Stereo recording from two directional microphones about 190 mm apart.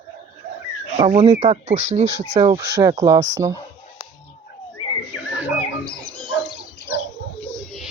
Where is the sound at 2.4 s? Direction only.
20° right (ahead or behind).